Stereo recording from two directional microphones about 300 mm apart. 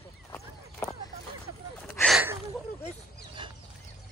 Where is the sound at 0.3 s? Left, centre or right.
Centre.